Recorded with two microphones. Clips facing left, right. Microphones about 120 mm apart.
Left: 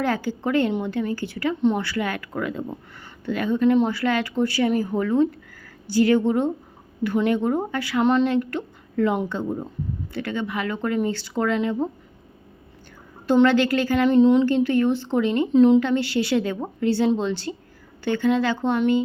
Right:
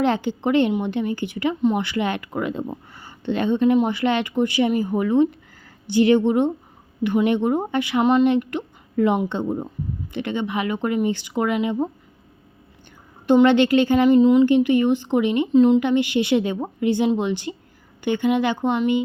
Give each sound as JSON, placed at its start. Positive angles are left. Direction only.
{"t": 0.0, "sound": "speech", "side_deg": -20}
{"t": 13.2, "sound": "speech", "side_deg": -20}
{"t": 14.1, "sound": "speech", "side_deg": -5}
{"t": 14.4, "sound": "speech", "side_deg": -15}
{"t": 15.5, "sound": "speech", "side_deg": 0}
{"t": 15.8, "sound": "speech", "side_deg": -15}